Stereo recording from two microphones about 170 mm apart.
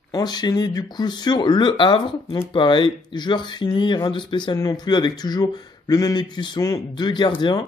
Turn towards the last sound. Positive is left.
turn(degrees=25)  # may be behind; listen again after turning